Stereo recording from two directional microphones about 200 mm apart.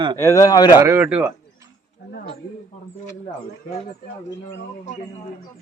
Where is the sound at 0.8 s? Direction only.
10° right (ahead or behind).